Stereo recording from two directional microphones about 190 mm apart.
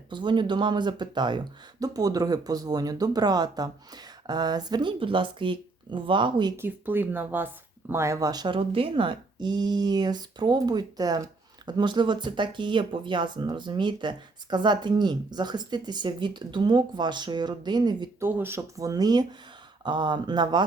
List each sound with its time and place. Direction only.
0.1 s speech: 25° right (ahead or behind)
6.6 s speech: 10° right (ahead or behind)
18.3 s speech: 10° right (ahead or behind)